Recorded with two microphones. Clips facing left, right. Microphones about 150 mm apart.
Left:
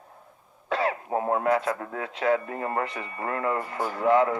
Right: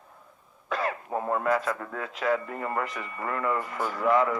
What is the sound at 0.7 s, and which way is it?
Throat clearing, 30° left (ahead or behind).